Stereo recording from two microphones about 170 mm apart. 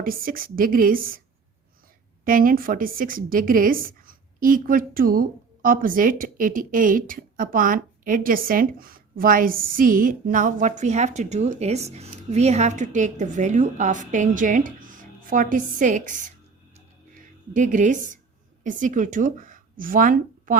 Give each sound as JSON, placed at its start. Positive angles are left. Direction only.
{"t": 0.0, "sound": "a woman's voice", "side_deg": -55}
{"t": 2.2, "sound": "a woman's voice", "side_deg": -55}
{"t": 17.5, "sound": "a woman's voice", "side_deg": -50}